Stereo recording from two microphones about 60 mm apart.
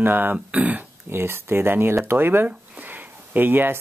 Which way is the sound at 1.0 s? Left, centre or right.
Right.